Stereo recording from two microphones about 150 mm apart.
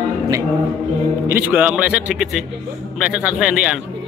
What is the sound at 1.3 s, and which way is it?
A man's voice, 10° right (ahead or behind).